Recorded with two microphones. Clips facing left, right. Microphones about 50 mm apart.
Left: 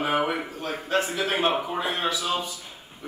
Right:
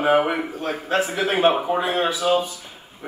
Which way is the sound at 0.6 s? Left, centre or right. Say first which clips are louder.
Right 3 dB; right.